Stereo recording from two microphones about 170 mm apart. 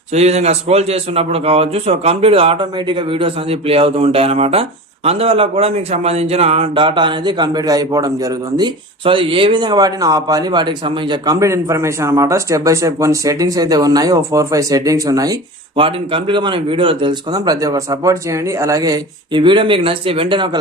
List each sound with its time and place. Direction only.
0.1 s a man's voice: 40° right (ahead or behind); by 15.4 s 20° right (ahead or behind)
15.7 s a man's voice: 30° right (ahead or behind)